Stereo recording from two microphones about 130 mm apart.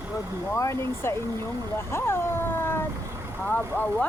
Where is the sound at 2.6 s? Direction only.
15° left (ahead or behind).